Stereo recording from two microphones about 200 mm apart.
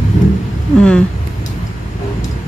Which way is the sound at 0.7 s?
5° left (ahead or behind).